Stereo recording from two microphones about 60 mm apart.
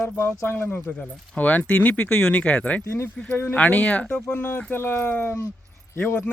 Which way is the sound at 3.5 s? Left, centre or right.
Left.